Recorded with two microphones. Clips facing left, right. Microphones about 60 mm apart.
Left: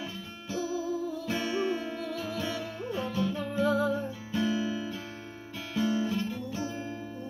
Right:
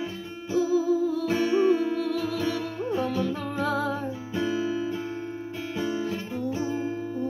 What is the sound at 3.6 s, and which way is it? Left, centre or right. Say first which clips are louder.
Music: left 1 dB; right.